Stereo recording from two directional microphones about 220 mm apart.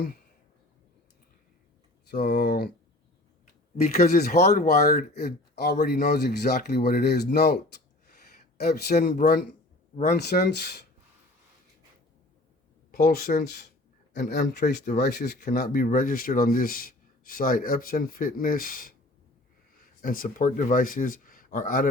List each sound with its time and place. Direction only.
2.2 s speech: 45° left (ahead or behind)
3.8 s speech: 30° left (ahead or behind)
4.4 s speech: 45° left (ahead or behind)
8.7 s speech: 45° left (ahead or behind)
12.9 s speech: 40° left (ahead or behind)
20.0 s speech: 40° left (ahead or behind)